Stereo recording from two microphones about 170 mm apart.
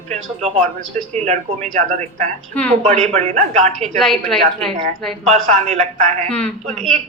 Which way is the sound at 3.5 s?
40° right (ahead or behind).